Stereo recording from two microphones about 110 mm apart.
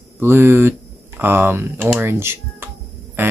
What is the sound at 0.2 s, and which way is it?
Speech, 20° right (ahead or behind).